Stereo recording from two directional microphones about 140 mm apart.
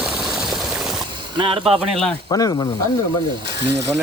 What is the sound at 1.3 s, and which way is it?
Speech, 40° right (ahead or behind).